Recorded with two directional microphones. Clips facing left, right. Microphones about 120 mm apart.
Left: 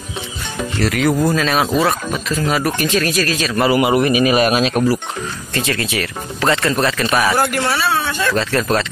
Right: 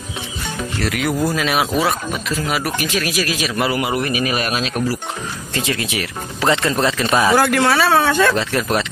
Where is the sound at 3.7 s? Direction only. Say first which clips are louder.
Left 6 dB; 20° left (ahead or behind).